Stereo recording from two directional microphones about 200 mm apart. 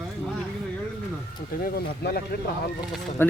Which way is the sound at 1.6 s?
50° left (ahead or behind).